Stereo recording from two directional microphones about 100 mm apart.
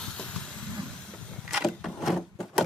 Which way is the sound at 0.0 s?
10° left (ahead or behind).